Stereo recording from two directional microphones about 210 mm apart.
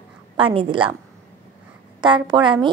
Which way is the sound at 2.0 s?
20° right (ahead or behind).